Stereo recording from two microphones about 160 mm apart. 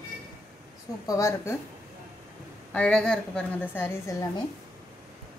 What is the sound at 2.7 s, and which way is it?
Speech, 5° left (ahead or behind).